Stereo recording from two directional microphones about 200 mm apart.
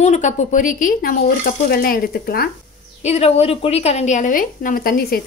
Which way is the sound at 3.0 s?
30° left (ahead or behind).